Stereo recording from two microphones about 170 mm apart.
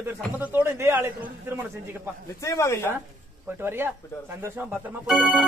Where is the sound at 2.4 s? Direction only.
15° left (ahead or behind).